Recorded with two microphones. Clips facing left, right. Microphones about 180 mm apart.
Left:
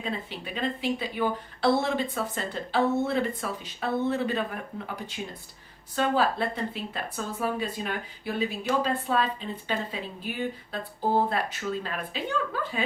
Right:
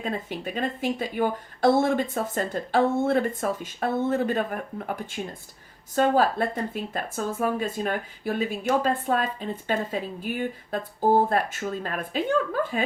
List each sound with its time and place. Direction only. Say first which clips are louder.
0.0 s speech: right 4 dB; 45° right (ahead or behind)